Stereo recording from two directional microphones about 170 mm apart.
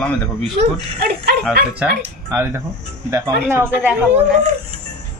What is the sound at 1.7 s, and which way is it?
Speech, 10° right (ahead or behind).